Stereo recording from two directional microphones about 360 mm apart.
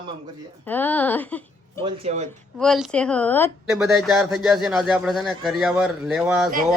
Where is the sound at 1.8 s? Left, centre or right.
Centre.